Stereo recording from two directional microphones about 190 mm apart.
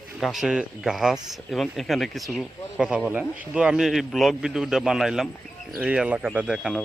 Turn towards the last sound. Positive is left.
turn(degrees=0)  # may be behind; listen again after turning